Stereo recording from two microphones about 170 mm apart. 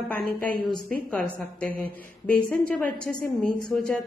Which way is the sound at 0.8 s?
10° left (ahead or behind).